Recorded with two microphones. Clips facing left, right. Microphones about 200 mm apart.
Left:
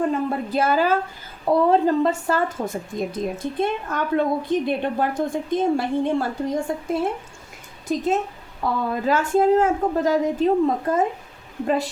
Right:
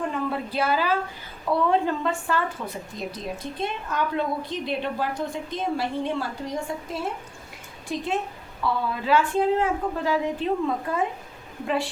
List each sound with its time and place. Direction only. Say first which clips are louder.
0.3 s a woman's voice: left 4 dB; 45° left (ahead or behind)